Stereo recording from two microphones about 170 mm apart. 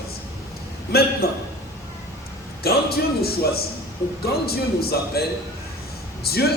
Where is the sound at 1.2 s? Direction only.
65° left (ahead or behind).